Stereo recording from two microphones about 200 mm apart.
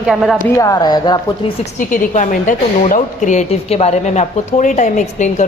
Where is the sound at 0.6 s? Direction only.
20° left (ahead or behind).